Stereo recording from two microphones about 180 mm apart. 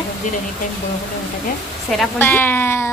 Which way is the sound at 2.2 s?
10° left (ahead or behind).